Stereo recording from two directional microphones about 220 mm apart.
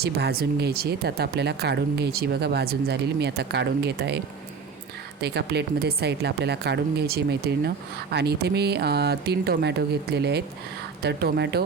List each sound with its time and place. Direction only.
0.0 s speech: 45° right (ahead or behind)
5.2 s speech: 50° right (ahead or behind)